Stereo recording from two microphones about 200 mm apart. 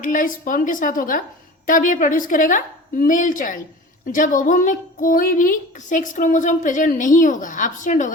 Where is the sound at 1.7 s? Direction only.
40° left (ahead or behind).